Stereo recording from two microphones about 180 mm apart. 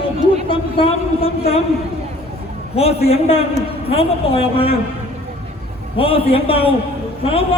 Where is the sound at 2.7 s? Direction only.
35° left (ahead or behind).